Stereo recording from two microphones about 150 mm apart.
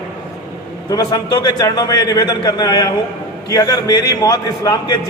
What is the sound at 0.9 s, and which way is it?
A man's voice, 25° left (ahead or behind).